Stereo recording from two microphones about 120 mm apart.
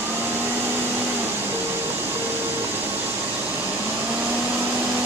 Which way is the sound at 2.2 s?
15° right (ahead or behind).